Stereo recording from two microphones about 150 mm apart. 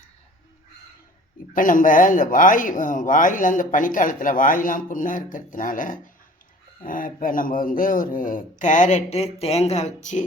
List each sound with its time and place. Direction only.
1.5 s speech: 65° left (ahead or behind)